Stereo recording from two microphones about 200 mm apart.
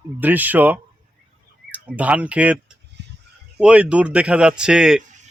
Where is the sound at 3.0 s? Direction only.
55° right (ahead or behind).